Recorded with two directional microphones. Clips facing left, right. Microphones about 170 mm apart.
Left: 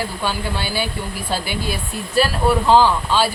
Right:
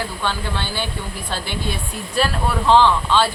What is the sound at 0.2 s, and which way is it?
Speech, 10° left (ahead or behind).